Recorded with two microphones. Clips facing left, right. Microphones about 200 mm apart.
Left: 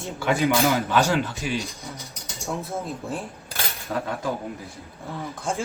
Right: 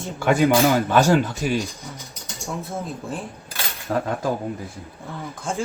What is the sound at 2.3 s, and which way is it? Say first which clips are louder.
Speech: even; centre (ahead or behind).